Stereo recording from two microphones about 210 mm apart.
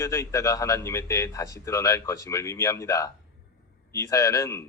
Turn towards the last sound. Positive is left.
turn(degrees=15)  # may be behind; listen again after turning